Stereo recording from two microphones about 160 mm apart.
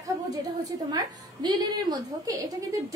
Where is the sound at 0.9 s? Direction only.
25° right (ahead or behind).